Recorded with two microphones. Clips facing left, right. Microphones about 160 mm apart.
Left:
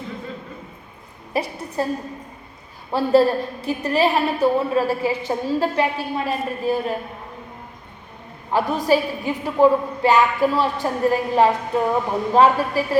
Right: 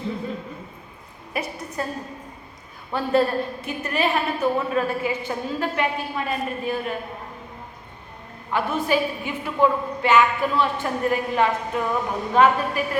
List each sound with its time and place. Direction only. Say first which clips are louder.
1.3 s a woman's voice: left 4 dB; 30° left (ahead or behind)
2.9 s a woman's voice: left 5 dB; 30° left (ahead or behind)
8.5 s a woman's voice: left 4 dB; 35° left (ahead or behind)